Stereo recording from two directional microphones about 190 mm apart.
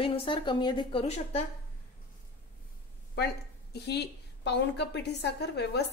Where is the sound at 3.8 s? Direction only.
60° left (ahead or behind).